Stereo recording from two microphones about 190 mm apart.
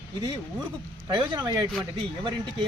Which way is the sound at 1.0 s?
20° right (ahead or behind).